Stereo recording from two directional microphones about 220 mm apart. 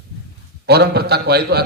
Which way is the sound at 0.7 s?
45° right (ahead or behind).